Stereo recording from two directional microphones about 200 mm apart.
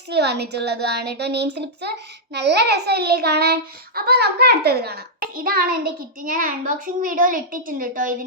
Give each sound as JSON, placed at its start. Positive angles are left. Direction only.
{"t": 0.1, "sound": "a child's voice", "side_deg": -55}